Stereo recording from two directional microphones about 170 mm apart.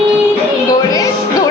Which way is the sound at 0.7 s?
20° left (ahead or behind).